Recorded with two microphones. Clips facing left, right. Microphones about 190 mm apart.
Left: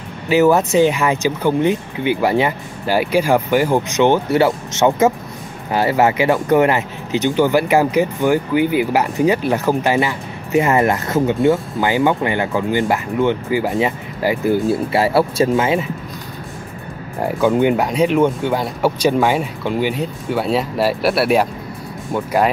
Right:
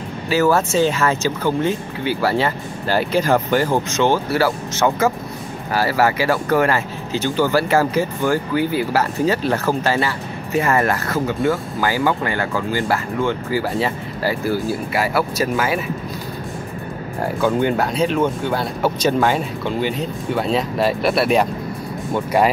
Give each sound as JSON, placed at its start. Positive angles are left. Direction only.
{"t": 0.3, "sound": "speech", "side_deg": 20}
{"t": 17.4, "sound": "speech", "side_deg": 15}